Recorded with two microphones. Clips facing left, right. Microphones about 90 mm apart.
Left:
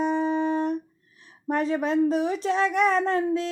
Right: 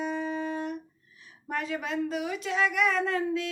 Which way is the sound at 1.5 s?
35° left (ahead or behind).